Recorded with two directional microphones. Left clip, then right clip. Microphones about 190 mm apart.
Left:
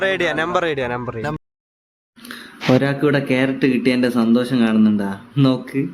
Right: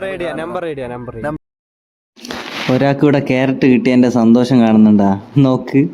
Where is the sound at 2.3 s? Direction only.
25° right (ahead or behind).